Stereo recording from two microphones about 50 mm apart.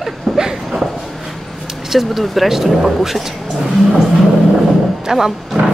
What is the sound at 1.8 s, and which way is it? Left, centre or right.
Speech, centre.